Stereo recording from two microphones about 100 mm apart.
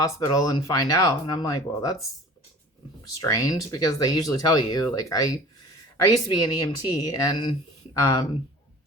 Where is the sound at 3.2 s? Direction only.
35° left (ahead or behind).